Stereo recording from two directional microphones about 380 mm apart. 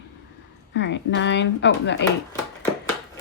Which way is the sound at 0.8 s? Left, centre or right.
Left.